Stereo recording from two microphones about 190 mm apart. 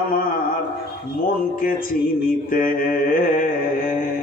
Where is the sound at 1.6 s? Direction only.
50° left (ahead or behind).